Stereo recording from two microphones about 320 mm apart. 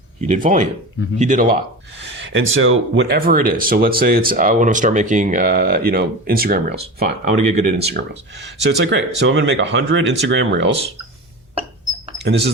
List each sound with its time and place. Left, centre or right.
0.2 s speech: right
2.1 s speech: right
12.2 s speech: right